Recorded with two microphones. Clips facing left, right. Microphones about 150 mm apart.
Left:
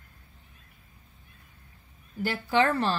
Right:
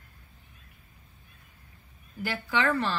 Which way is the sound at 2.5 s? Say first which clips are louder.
Left 3 dB; 35° left (ahead or behind).